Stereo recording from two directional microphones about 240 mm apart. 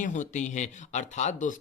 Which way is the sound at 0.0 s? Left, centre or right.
Left.